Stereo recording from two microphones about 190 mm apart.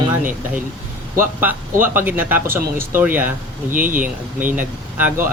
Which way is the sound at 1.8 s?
10° right (ahead or behind).